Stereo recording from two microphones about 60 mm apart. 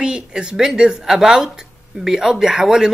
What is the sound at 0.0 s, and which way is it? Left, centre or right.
Speech, centre.